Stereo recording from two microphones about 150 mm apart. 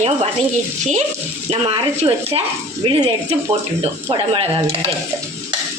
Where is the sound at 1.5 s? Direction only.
35° right (ahead or behind).